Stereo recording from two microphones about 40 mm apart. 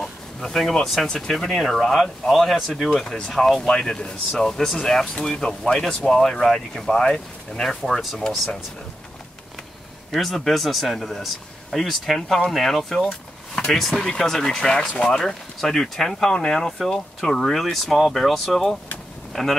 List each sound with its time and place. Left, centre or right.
0.0 s a sound: centre
1.0 s speech: centre
3.6 s speech: centre
10.1 s speech: centre